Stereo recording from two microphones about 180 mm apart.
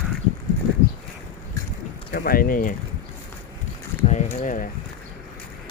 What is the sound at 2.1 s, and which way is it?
Speech, 55° left (ahead or behind).